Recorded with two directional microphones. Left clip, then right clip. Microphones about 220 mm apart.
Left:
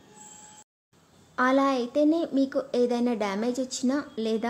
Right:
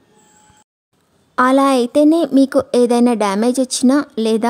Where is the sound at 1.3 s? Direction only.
50° right (ahead or behind).